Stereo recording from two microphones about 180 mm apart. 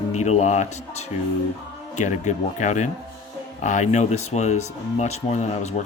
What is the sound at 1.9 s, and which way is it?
Speech, 40° left (ahead or behind).